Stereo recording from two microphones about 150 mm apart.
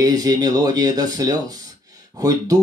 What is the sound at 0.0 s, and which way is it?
Speech, 25° right (ahead or behind).